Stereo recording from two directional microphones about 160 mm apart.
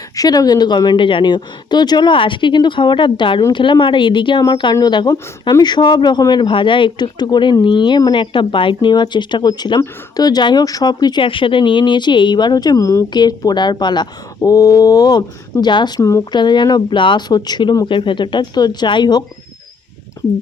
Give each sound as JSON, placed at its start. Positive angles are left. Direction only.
{"t": 0.2, "sound": "speech", "side_deg": 25}